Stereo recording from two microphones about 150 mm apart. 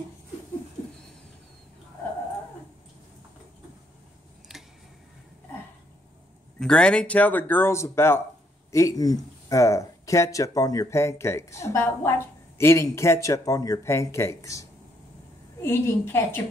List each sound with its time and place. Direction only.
6.6 s speech: 5° left (ahead or behind)